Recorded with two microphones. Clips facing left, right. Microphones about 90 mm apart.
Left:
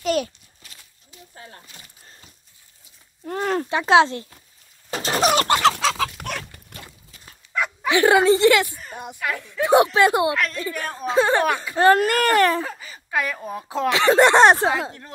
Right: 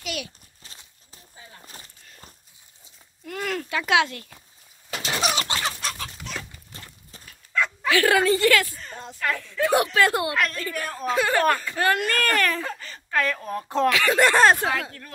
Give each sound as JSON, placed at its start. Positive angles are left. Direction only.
{"t": 0.0, "sound": "a child's voice", "side_deg": 40}
{"t": 0.6, "sound": "horse", "side_deg": -30}
{"t": 1.3, "sound": "a sound", "side_deg": 55}
{"t": 3.3, "sound": "speech", "side_deg": 35}
{"t": 4.9, "sound": "a sound", "side_deg": 40}
{"t": 5.6, "sound": "chicken", "side_deg": 90}
{"t": 7.5, "sound": "speech", "side_deg": 15}
{"t": 10.3, "sound": "a woman's voice", "side_deg": 0}
{"t": 11.1, "sound": "speech", "side_deg": 25}
{"t": 12.6, "sound": "speech", "side_deg": 10}
{"t": 13.8, "sound": "speech", "side_deg": 25}